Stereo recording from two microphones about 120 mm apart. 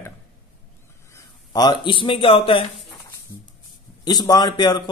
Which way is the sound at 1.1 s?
35° left (ahead or behind).